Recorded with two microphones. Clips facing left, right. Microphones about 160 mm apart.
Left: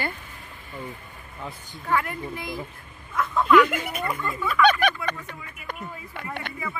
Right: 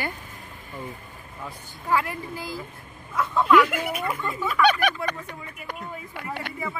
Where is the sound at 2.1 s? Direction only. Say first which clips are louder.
Left 1 dB; 30° right (ahead or behind).